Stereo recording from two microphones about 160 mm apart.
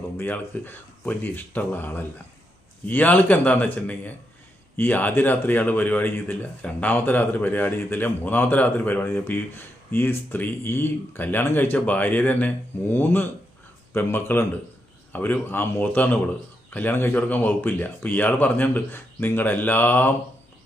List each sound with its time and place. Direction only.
0.2 s speech: 10° left (ahead or behind)